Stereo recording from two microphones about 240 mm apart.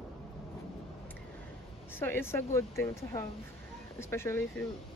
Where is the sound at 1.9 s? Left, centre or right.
Centre.